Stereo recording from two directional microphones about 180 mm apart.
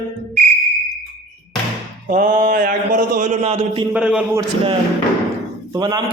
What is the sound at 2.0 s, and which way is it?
A man's voice, 45° right (ahead or behind).